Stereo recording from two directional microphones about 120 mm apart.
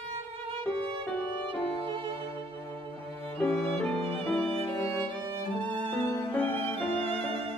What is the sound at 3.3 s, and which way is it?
Music, 20° left (ahead or behind).